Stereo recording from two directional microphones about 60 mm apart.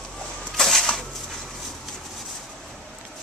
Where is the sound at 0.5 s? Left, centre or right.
Centre.